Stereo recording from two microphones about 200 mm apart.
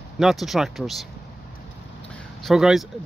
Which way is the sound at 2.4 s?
Centre (ahead or behind).